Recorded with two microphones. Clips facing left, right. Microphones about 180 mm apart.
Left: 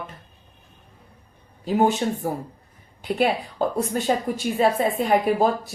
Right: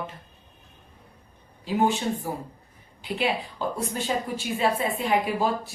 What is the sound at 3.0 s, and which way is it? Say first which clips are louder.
A woman's voice: left 5 dB; 45° left (ahead or behind).